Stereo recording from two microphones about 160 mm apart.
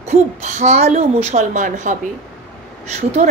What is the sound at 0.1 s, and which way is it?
Speech, 50° right (ahead or behind).